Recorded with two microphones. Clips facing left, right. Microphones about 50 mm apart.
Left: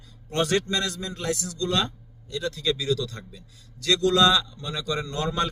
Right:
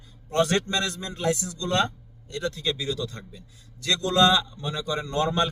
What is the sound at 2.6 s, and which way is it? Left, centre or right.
A man's voice, right.